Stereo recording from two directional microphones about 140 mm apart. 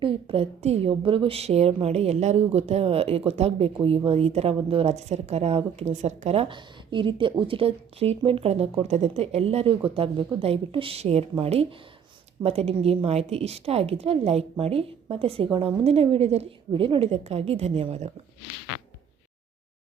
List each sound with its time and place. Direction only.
0.0 s a woman's voice: 40° right (ahead or behind)